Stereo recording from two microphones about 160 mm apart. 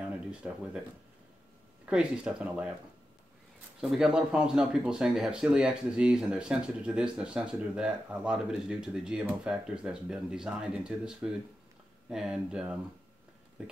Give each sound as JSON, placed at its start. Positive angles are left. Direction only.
{"t": 0.3, "sound": "speech", "side_deg": -5}
{"t": 1.9, "sound": "speech", "side_deg": -5}
{"t": 3.8, "sound": "speech", "side_deg": -5}
{"t": 13.6, "sound": "a sound", "side_deg": -5}